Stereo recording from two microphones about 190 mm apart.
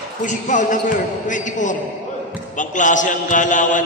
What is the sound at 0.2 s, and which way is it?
A man's voice, 40° left (ahead or behind).